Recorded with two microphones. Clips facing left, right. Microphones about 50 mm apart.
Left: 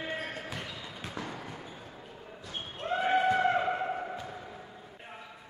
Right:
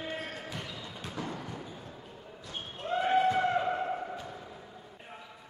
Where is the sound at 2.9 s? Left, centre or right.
Centre.